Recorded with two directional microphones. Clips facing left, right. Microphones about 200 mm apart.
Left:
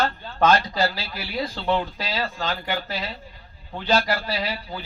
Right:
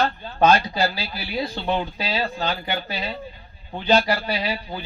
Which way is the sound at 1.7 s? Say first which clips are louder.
Left 3 dB; 15° right (ahead or behind).